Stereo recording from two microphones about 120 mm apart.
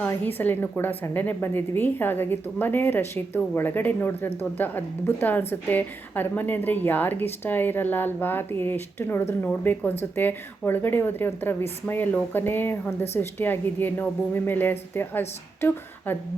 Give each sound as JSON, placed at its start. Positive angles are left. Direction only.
{"t": 0.1, "sound": "a woman's voice", "side_deg": 15}